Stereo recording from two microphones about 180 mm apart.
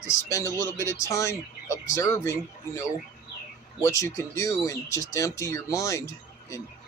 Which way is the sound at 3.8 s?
15° left (ahead or behind).